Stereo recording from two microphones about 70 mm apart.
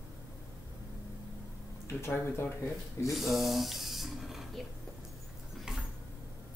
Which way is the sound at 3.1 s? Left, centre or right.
Centre.